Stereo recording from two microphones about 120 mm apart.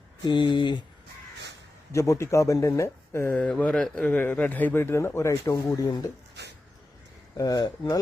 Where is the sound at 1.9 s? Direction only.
25° left (ahead or behind).